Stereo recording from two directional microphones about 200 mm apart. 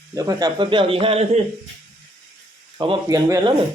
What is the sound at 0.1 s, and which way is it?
A man's voice, 20° right (ahead or behind).